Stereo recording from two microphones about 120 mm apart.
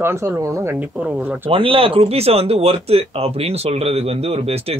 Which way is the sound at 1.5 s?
50° right (ahead or behind).